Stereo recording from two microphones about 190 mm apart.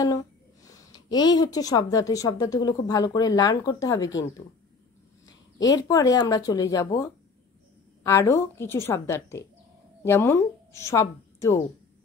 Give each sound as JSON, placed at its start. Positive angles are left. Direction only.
{"t": 0.7, "sound": "a woman's voice", "side_deg": 20}
{"t": 5.2, "sound": "speech", "side_deg": 20}
{"t": 8.0, "sound": "a woman's voice", "side_deg": 15}